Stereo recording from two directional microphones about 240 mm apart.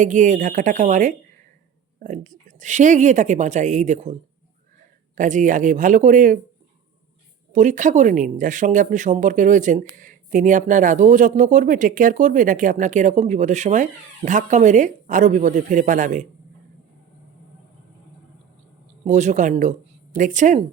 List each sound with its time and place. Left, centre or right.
0.0 s speech: right
5.1 s speech: right
7.5 s speech: right
19.0 s speech: right